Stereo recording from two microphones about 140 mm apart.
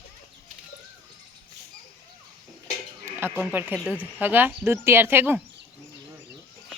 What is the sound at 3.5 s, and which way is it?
Speech, 15° right (ahead or behind).